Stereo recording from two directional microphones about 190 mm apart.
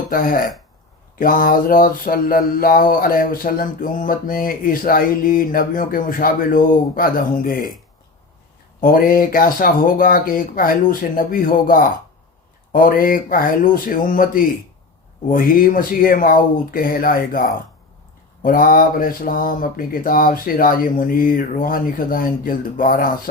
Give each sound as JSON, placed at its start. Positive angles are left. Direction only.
{"t": 0.1, "sound": "mantra", "side_deg": 50}
{"t": 8.8, "sound": "mantra", "side_deg": 45}